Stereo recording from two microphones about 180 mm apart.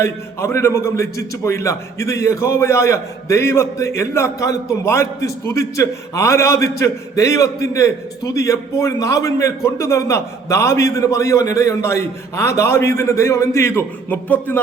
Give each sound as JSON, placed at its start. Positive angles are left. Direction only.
{"t": 0.0, "sound": "a man's voice", "side_deg": 15}